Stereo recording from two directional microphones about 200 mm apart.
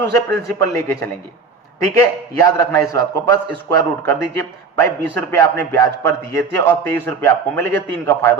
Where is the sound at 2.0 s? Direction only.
15° left (ahead or behind).